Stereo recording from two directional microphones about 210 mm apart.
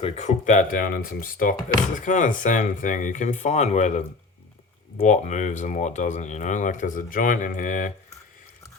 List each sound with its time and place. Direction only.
0.0 s speech: 35° left (ahead or behind)